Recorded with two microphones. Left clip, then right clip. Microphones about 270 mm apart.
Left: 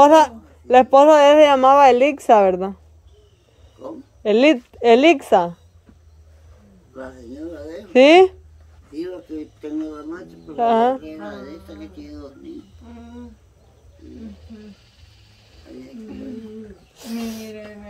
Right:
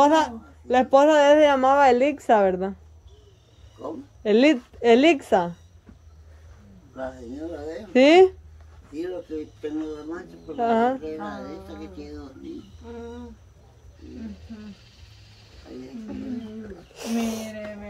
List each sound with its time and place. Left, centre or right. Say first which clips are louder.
0.0 s speech: left 7 dB; centre
4.2 s speech: left 4 dB; centre
7.9 s speech: left 4 dB; centre
10.5 s speech: left 5 dB; centre
16.9 s speech: right 3 dB; centre